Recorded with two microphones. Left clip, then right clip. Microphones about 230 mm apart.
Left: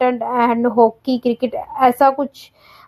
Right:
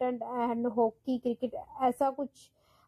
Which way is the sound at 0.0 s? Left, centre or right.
Left.